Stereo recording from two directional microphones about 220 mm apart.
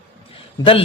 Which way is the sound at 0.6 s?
25° left (ahead or behind).